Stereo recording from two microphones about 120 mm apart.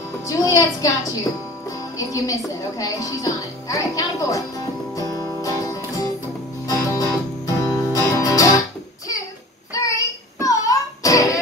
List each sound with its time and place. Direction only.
0.3 s a woman's voice: 30° left (ahead or behind)
6.7 s music: 30° left (ahead or behind)
9.8 s child singing: 30° left (ahead or behind)